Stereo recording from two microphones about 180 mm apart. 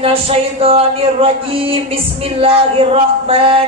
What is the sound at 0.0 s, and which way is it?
Speech, 30° right (ahead or behind).